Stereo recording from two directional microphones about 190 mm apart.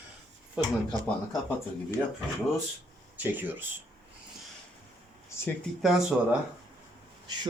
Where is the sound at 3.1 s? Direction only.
10° right (ahead or behind).